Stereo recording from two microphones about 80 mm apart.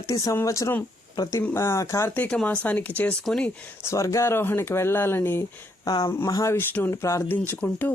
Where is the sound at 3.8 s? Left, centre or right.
Left.